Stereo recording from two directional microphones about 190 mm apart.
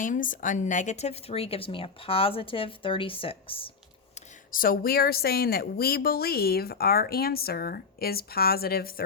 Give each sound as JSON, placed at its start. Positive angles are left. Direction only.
{"t": 0.0, "sound": "speech", "side_deg": 45}
{"t": 4.1, "sound": "speech", "side_deg": 45}